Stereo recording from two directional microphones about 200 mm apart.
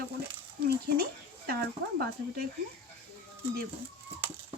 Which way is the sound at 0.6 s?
50° right (ahead or behind).